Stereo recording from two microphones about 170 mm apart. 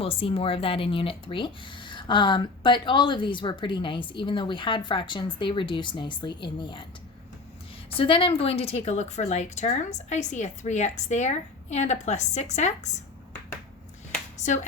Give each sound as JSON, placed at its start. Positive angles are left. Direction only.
{"t": 0.0, "sound": "speech", "side_deg": 35}
{"t": 7.9, "sound": "a woman's voice", "side_deg": 30}
{"t": 14.3, "sound": "speech", "side_deg": 45}